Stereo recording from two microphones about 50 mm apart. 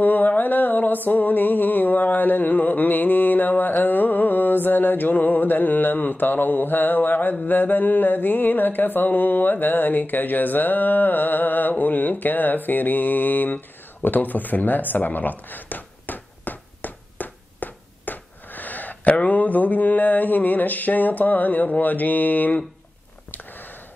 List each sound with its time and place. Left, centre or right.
0.0 s music: left
7.4 s mantra: left
23.3 s a sound: left